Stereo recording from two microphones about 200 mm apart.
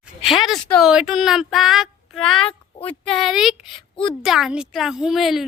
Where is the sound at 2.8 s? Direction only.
30° left (ahead or behind).